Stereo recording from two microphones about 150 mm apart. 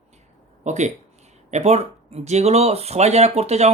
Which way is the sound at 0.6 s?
50° right (ahead or behind).